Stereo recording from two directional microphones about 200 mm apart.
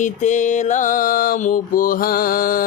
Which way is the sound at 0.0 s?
40° left (ahead or behind).